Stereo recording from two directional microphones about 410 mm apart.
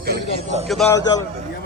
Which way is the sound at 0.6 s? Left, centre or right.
Centre.